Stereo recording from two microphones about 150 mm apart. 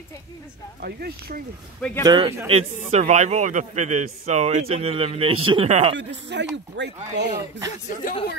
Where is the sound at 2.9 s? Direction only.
50° right (ahead or behind).